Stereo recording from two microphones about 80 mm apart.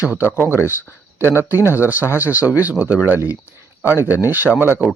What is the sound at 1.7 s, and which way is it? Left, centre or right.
Speech, right.